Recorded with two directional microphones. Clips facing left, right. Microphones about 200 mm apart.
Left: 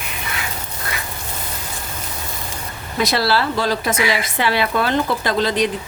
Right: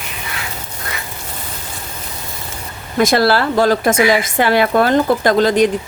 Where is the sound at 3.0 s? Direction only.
50° right (ahead or behind).